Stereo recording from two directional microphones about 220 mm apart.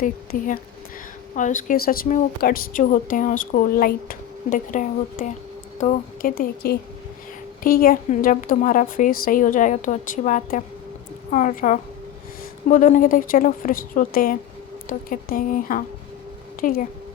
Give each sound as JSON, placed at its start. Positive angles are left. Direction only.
{"t": 0.3, "sound": "a woman's voice", "side_deg": 35}